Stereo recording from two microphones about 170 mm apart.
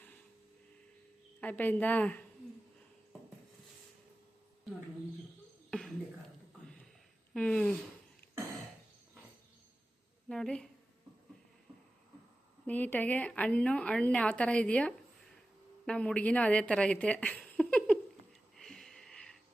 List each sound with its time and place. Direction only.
1.4 s a woman's voice: 10° left (ahead or behind)
5.7 s a sound: 5° left (ahead or behind)
7.3 s speech: 5° left (ahead or behind)
10.2 s speech: 5° left (ahead or behind)
12.6 s a woman's voice: 10° left (ahead or behind)
18.5 s sniff: 5° left (ahead or behind)